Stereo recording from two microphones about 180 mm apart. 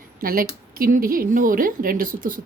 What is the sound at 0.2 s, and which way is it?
A woman's voice, 55° right (ahead or behind).